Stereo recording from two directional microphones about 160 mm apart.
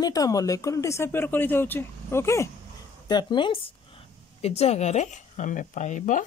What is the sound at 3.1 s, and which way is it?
Speech, 30° left (ahead or behind).